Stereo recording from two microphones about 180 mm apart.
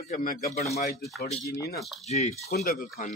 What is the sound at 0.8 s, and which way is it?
Speech, 40° left (ahead or behind).